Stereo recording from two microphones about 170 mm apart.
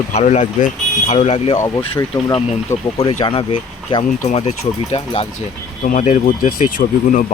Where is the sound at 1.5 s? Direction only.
25° left (ahead or behind).